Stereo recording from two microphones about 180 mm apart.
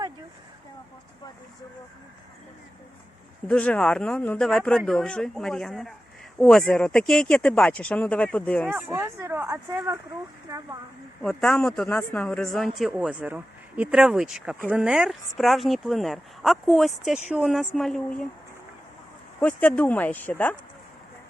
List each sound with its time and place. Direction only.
3.4 s speech: 5° left (ahead or behind)
8.7 s speech: 15° right (ahead or behind)
11.2 s speech: 5° left (ahead or behind)
19.4 s speech: 10° left (ahead or behind)